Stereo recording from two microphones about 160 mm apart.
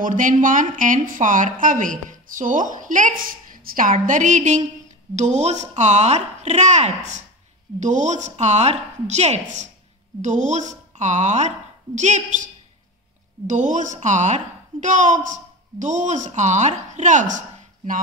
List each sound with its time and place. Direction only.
0.0 s a woman's voice: 55° right (ahead or behind)
13.5 s a woman's voice: 50° right (ahead or behind)